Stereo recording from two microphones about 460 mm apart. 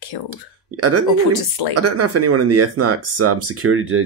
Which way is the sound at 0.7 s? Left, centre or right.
Right.